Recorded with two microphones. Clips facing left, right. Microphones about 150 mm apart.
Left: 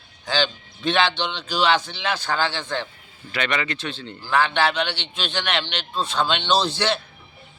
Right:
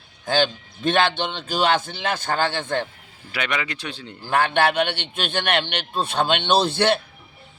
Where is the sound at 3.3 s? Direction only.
10° right (ahead or behind).